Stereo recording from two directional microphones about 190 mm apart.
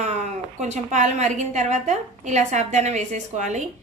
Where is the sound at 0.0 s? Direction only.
35° right (ahead or behind).